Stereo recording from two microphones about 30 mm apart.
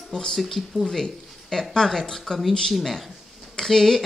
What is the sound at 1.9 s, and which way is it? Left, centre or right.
Speech, centre.